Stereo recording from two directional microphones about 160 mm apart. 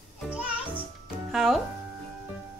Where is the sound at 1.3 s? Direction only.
Centre (ahead or behind).